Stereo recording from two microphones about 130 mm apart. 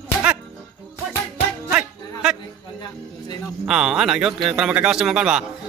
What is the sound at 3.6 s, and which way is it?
A man's voice, 5° right (ahead or behind).